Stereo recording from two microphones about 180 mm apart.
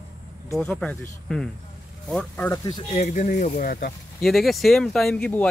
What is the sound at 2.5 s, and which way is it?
Speech, 20° left (ahead or behind).